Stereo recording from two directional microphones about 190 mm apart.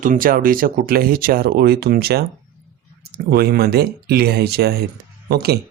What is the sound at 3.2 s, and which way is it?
Speech, 55° right (ahead or behind).